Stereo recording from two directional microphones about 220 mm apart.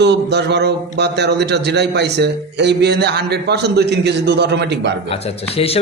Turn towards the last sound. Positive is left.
turn(degrees=25)  # may be behind; listen again after turning